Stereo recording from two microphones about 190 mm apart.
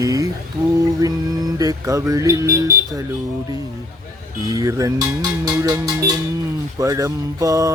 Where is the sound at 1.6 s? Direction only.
15° right (ahead or behind).